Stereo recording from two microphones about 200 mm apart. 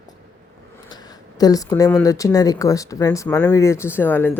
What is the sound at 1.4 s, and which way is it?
Speech, 15° left (ahead or behind).